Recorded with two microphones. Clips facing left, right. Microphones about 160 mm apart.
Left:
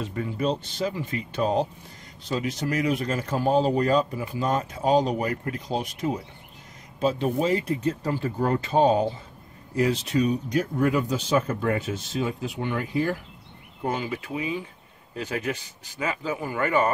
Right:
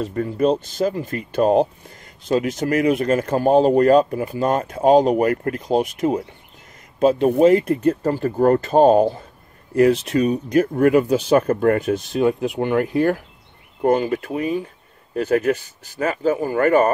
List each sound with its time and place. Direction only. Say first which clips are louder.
0.0 s speech: right 8 dB; 45° right (ahead or behind)